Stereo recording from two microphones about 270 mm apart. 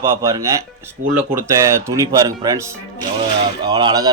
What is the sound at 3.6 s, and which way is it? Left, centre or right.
Speech, centre.